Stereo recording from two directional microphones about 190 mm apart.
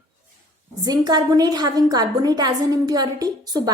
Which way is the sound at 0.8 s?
20° right (ahead or behind).